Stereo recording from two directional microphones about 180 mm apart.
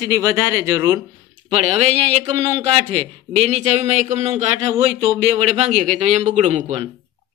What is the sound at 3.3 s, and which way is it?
A man's voice, 35° right (ahead or behind).